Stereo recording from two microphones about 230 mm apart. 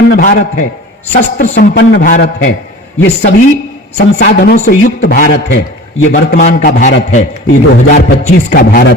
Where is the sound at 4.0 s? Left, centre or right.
Left.